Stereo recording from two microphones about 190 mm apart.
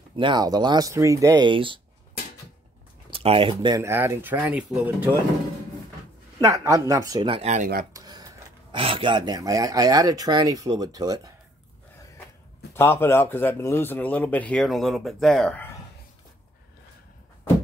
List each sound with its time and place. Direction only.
0.1 s speech: 25° right (ahead or behind)
3.1 s speech: 30° right (ahead or behind); by 5.1 s 5° right (ahead or behind)
6.4 s speech: 15° right (ahead or behind)
7.4 s speech: 40° right (ahead or behind)
7.9 s a sound: 20° right (ahead or behind)
8.7 s speech: 25° right (ahead or behind)
12.7 s speech: 10° left (ahead or behind)